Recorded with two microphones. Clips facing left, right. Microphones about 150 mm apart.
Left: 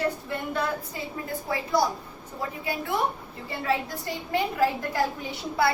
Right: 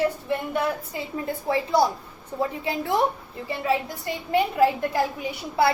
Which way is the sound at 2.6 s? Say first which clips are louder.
Right 4 dB; 30° right (ahead or behind).